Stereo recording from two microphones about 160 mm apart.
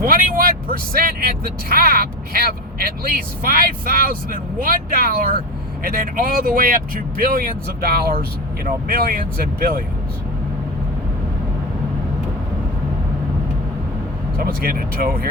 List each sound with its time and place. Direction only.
0.0 s speech: 60° right (ahead or behind)
14.3 s speech: 65° right (ahead or behind)